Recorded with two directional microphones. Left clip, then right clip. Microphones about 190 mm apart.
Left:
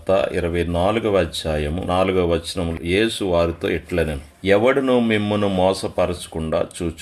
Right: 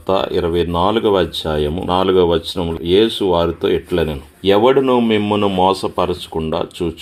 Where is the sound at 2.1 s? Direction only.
5° right (ahead or behind).